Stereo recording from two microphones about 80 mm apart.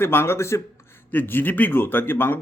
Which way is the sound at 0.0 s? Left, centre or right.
Left.